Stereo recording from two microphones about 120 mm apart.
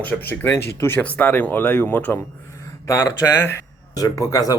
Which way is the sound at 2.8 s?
30° left (ahead or behind).